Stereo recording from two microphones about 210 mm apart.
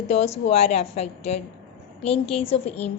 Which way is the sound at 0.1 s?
30° left (ahead or behind).